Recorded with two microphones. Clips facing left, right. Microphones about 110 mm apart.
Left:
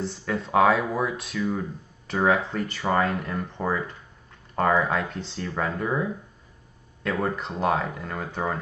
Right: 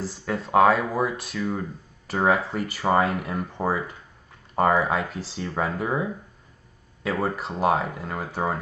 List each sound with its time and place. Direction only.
0.0 s speech: 5° right (ahead or behind)